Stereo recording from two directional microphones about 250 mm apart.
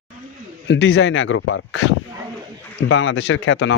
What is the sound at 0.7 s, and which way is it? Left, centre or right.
Speech, left.